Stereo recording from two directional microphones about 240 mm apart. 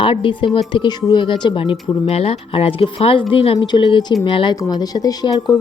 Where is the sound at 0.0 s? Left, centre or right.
Left.